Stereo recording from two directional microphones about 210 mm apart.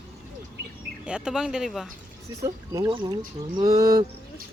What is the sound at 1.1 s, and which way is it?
Speech, 5° right (ahead or behind).